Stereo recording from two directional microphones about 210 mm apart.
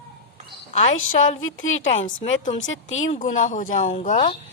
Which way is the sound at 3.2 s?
35° left (ahead or behind).